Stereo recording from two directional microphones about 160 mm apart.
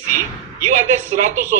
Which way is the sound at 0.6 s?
55° right (ahead or behind).